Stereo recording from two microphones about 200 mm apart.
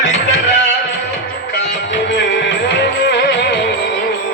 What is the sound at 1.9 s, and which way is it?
Music, 60° left (ahead or behind).